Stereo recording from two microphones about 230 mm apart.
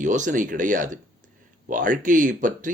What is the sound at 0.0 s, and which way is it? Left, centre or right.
Speech, right.